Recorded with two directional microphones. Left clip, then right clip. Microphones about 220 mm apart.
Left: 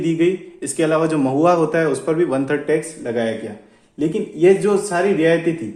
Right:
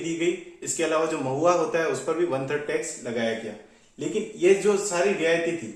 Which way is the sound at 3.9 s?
45° left (ahead or behind).